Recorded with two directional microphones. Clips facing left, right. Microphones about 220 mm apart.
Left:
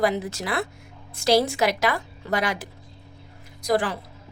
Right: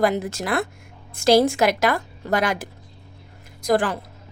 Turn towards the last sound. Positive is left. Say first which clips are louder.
# right 3 dB
turn(degrees=-50)  # may be behind; listen again after turning